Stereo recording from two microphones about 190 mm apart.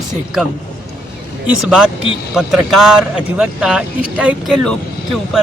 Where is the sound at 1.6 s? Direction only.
5° right (ahead or behind).